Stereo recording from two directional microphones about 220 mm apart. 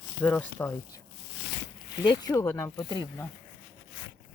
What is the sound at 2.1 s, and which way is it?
Speech, 15° left (ahead or behind).